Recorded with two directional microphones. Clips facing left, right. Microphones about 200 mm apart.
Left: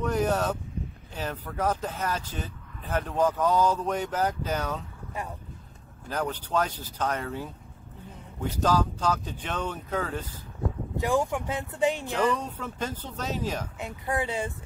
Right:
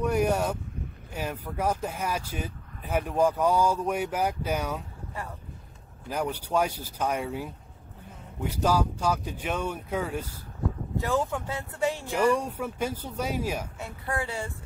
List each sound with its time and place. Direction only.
0.0 s speech: 10° right (ahead or behind)
6.0 s speech: 10° right (ahead or behind)
11.0 s speech: 15° left (ahead or behind)
12.1 s speech: 10° right (ahead or behind)
13.7 s speech: 20° left (ahead or behind)